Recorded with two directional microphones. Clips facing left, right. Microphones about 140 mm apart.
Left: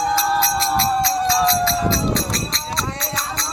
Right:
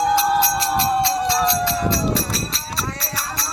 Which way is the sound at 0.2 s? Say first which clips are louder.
Right 1 dB; 15° right (ahead or behind).